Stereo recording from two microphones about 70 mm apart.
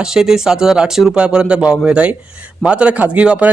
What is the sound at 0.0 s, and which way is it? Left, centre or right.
A man's voice, centre.